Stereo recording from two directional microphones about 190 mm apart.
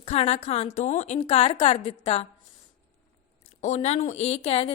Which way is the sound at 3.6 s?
35° left (ahead or behind).